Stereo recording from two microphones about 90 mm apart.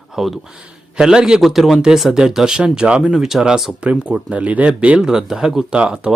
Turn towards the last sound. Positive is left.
turn(degrees=-10)  # may be behind; listen again after turning